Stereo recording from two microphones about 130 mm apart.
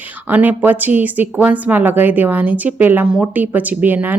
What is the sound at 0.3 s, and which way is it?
Speech, 15° right (ahead or behind).